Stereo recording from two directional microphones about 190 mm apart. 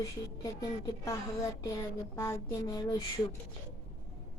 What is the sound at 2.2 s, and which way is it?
Speech, 20° left (ahead or behind).